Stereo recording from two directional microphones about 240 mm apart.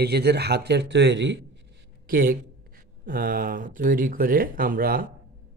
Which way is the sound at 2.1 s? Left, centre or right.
Right.